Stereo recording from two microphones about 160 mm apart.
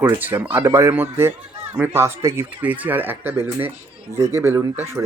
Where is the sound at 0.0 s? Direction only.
10° right (ahead or behind).